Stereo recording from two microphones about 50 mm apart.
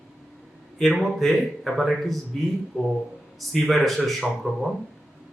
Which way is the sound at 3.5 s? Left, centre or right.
Centre.